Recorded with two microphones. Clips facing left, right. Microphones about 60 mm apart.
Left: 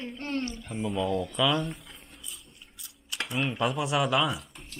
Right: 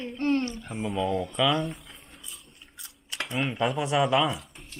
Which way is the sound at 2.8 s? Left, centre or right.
Right.